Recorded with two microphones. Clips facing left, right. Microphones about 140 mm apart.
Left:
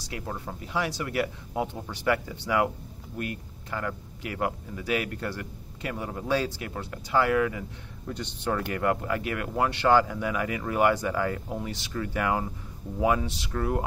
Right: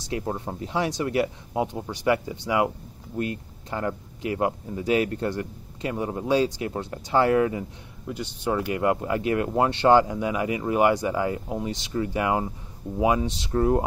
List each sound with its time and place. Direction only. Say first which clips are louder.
0.1 s speech: right 6 dB; 30° right (ahead or behind)
8.1 s speech: right 3 dB; 10° right (ahead or behind); by 13.8 s 30° right (ahead or behind)